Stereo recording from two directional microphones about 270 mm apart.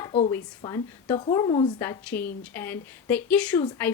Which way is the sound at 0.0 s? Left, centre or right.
Left.